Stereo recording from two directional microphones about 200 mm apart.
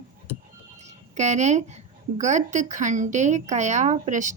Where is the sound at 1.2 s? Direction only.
35° right (ahead or behind).